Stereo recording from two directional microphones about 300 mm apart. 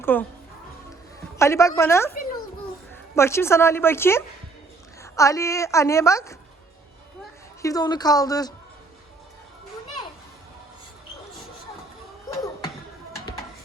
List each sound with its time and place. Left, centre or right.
0.0 s a woman's voice: centre
1.4 s a woman's voice: centre
3.2 s a woman's voice: centre
7.6 s a woman's voice: centre